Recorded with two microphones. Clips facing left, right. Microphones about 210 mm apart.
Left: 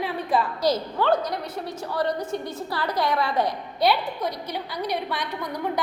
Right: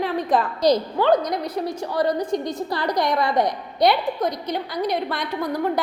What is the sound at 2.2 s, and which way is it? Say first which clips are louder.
Speech: right 5 dB; 5° left (ahead or behind).